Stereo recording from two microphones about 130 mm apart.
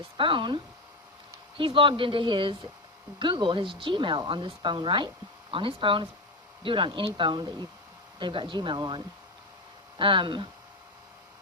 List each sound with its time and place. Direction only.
0.2 s speech: 40° right (ahead or behind)